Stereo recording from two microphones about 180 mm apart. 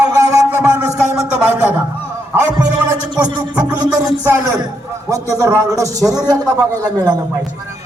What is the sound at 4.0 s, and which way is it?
A man's voice, 15° right (ahead or behind).